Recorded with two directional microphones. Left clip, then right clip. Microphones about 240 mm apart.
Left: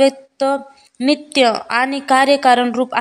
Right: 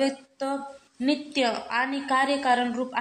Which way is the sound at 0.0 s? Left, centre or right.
Left.